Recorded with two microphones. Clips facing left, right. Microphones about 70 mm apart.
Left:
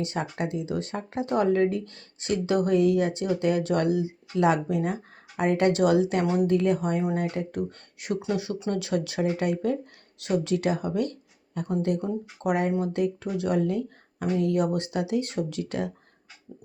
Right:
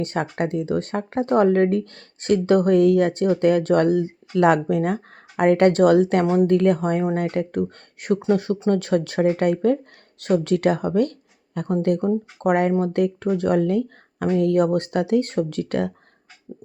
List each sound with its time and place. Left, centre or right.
0.0 s speech: right
6.2 s speech: right
6.5 s speech: right
7.2 s speech: right